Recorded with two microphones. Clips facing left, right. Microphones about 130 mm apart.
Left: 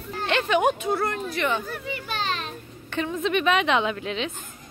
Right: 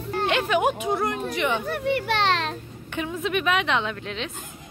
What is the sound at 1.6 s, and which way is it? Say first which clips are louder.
Speech: right 8 dB; 65° right (ahead or behind).